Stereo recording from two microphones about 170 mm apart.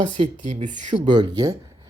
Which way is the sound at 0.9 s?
25° right (ahead or behind).